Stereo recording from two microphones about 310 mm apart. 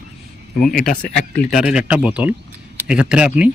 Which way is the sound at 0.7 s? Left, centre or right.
Left.